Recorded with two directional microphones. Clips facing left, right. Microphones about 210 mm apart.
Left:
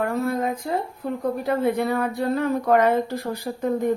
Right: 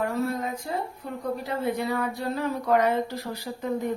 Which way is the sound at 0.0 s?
55° left (ahead or behind).